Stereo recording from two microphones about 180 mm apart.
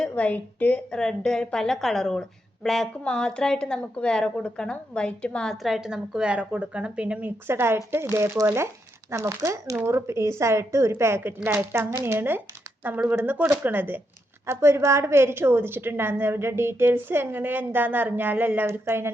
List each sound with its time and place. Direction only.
0.0 s a woman's voice: 10° left (ahead or behind); by 19.1 s 15° right (ahead or behind)